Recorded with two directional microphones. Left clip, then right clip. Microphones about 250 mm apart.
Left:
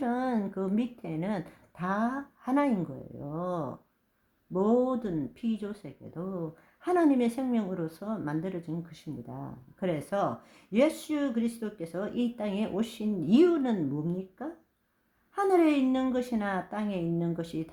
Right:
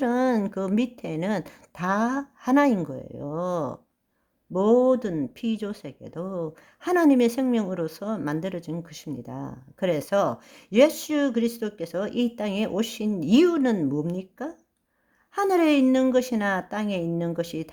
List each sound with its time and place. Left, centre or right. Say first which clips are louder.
0.0 s speech: right 7 dB; right